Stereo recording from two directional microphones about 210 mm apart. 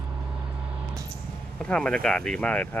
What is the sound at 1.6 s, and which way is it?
Speech, 5° left (ahead or behind).